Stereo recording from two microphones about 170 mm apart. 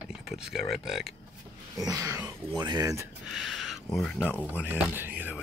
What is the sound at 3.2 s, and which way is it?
Speech, centre (ahead or behind).